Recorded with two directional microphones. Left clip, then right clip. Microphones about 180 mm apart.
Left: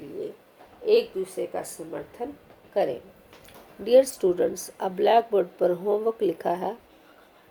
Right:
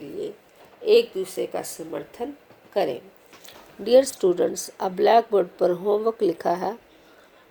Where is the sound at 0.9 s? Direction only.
50° right (ahead or behind).